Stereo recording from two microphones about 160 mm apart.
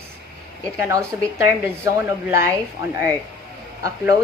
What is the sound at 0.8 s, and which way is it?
A woman's voice, 15° right (ahead or behind).